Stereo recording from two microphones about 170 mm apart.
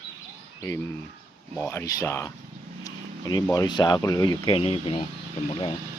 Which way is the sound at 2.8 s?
20° left (ahead or behind).